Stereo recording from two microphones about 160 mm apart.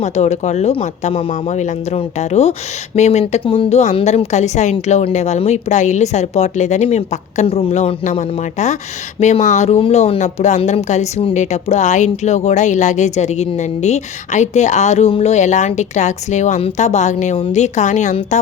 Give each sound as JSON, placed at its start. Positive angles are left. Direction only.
{"t": 0.0, "sound": "speech", "side_deg": 45}